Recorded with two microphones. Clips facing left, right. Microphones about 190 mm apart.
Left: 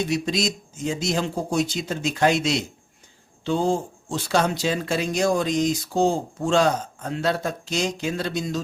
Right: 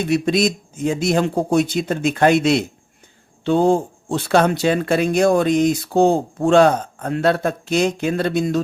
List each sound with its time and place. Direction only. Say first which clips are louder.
0.0 s speech: right 6 dB; 55° right (ahead or behind)